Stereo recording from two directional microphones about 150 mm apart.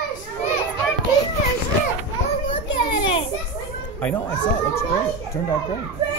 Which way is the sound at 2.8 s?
35° left (ahead or behind).